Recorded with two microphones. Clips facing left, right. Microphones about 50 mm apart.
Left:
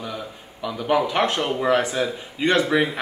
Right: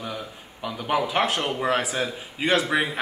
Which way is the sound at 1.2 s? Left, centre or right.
Centre.